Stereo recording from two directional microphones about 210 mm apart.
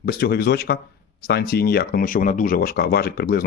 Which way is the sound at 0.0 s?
50° left (ahead or behind).